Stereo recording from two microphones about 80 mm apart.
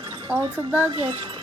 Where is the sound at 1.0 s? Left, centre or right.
Right.